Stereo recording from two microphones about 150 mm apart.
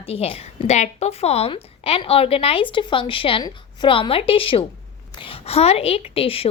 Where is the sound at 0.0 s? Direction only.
40° left (ahead or behind).